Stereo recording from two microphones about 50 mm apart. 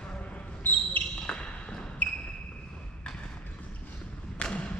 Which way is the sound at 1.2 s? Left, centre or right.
Centre.